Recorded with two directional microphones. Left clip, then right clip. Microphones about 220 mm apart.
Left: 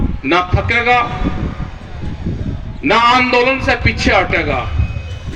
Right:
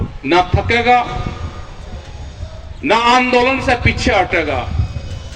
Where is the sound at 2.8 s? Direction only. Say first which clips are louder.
Left 1 dB; 50° left (ahead or behind).